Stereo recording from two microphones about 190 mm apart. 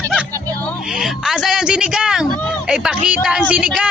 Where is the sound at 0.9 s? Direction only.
5° right (ahead or behind).